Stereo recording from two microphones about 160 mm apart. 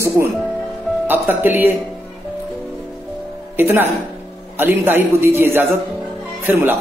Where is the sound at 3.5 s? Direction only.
15° right (ahead or behind).